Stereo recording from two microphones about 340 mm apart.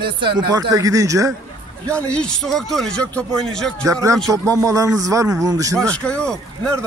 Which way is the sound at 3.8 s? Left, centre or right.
Centre.